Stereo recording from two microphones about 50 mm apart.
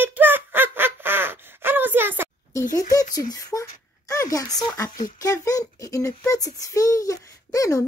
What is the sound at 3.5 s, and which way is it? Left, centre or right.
Speech, left.